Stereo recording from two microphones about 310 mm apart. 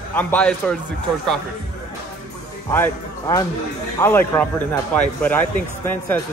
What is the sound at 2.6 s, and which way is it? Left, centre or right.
Speech, centre.